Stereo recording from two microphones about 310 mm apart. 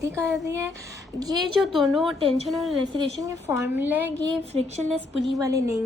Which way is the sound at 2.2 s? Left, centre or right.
Centre.